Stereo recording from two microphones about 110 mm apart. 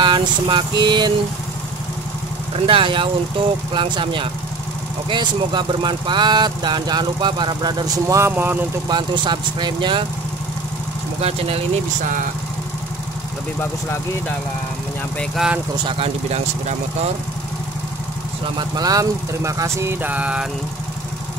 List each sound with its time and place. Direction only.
0.0 s speech: 45° right (ahead or behind)
2.5 s speech: 55° right (ahead or behind); by 8.3 s 30° right (ahead or behind)
8.3 s speech: 15° right (ahead or behind)
8.8 s speech: 40° right (ahead or behind)
11.1 s speech: 65° right (ahead or behind)
15.3 s speech: 5° right (ahead or behind)
18.6 s speech: 35° right (ahead or behind); by 20.4 s 10° right (ahead or behind)